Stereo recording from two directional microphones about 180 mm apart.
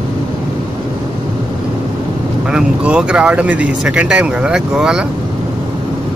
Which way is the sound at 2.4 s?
5° right (ahead or behind).